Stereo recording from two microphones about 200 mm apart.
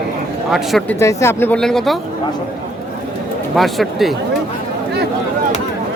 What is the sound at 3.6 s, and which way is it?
Speech, centre (ahead or behind).